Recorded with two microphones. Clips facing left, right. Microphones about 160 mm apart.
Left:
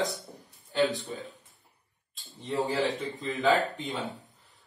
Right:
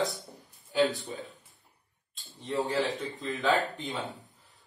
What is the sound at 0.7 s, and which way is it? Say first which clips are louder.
Speech: even; centre (ahead or behind).